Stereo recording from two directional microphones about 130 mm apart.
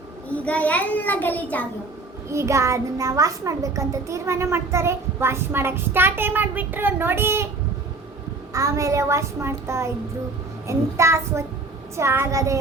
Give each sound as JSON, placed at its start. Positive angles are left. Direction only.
{"t": 0.3, "sound": "a child's voice", "side_deg": 10}
{"t": 2.3, "sound": "a child's voice", "side_deg": -25}
{"t": 8.5, "sound": "a child's voice", "side_deg": -25}